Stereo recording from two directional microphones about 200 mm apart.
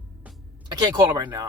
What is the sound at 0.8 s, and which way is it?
Speech, 15° right (ahead or behind).